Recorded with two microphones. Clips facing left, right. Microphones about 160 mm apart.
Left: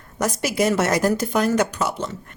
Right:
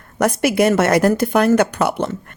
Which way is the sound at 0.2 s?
60° right (ahead or behind).